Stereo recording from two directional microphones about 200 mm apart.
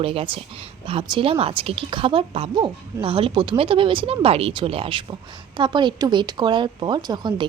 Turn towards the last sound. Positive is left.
turn(degrees=-20)  # may be behind; listen again after turning